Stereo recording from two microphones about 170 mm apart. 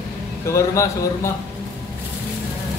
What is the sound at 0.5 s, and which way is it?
Speech, 20° left (ahead or behind).